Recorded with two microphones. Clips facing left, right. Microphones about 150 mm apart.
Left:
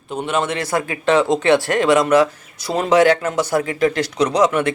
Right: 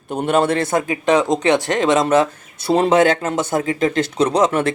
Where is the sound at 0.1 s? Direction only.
45° right (ahead or behind).